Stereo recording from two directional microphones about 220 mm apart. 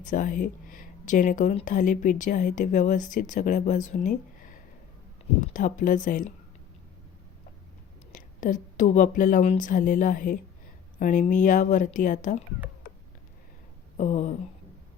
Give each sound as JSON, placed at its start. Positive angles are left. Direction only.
{"t": 0.0, "sound": "speech", "side_deg": 35}
{"t": 8.1, "sound": "a woman's voice", "side_deg": 35}
{"t": 13.9, "sound": "speech", "side_deg": 35}